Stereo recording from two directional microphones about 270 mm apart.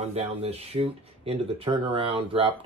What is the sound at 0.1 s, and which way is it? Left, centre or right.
Speech, right.